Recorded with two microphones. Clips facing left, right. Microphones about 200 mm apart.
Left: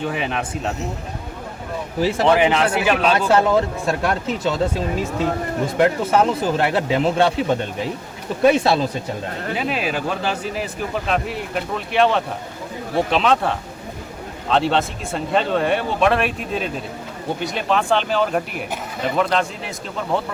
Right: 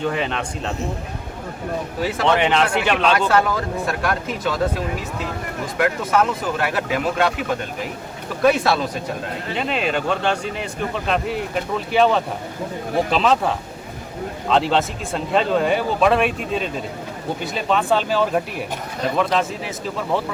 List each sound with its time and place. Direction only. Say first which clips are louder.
0.0 s speech: right 1 dB; 5° left (ahead or behind)
2.0 s speech: left 6 dB; 30° left (ahead or behind)
2.3 s speech: right 1 dB; 5° left (ahead or behind)
3.2 s speech: left 3 dB; 25° left (ahead or behind)
5.7 s speech: left 2 dB; 30° left (ahead or behind)
9.6 s speech: right 2 dB; 5° left (ahead or behind)
14.5 s speech: even; centre (ahead or behind)